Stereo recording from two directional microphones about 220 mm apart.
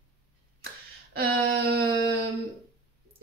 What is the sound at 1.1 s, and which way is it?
Speech, 45° right (ahead or behind).